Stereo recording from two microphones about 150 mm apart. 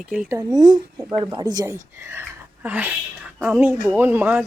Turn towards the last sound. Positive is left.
turn(degrees=-10)  # may be behind; listen again after turning